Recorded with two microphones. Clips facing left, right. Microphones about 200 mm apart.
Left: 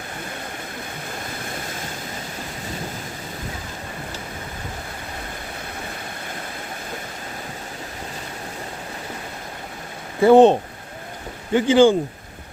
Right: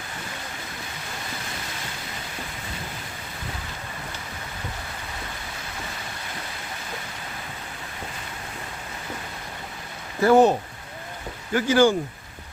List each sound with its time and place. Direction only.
10.2 s speech: 25° left (ahead or behind)